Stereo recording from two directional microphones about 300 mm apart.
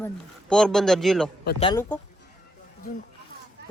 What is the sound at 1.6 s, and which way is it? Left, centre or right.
Speech, centre.